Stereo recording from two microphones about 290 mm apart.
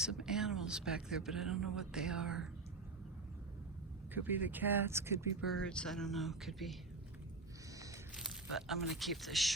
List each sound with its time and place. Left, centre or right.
0.0 s speech: centre
4.1 s speech: centre
5.5 s speech: centre
8.1 s speech: centre